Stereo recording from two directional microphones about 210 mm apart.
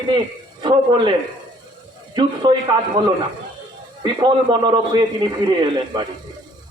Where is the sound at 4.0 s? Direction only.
20° right (ahead or behind).